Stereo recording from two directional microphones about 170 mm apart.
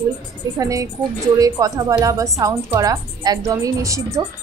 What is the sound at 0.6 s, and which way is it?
Speech, 20° right (ahead or behind).